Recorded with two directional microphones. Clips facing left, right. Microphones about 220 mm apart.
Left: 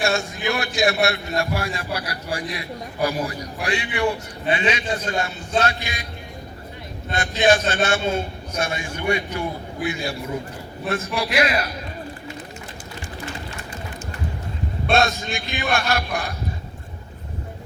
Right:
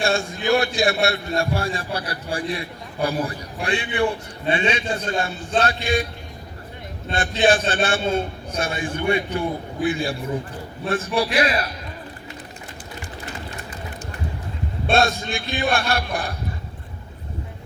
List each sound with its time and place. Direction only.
0.0 s a man's voice: 30° right (ahead or behind)
7.1 s a man's voice: 30° right (ahead or behind)
14.8 s a man's voice: 30° right (ahead or behind)